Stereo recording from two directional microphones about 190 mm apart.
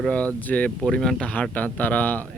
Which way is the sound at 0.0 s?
5° left (ahead or behind).